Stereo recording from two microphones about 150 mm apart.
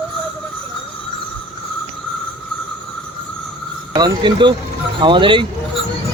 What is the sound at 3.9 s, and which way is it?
Speech, 30° right (ahead or behind).